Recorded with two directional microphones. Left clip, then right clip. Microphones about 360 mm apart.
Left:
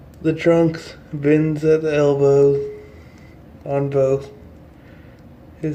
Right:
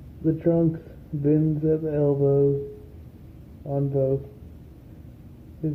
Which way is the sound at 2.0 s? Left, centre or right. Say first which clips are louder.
Left 6 dB; centre.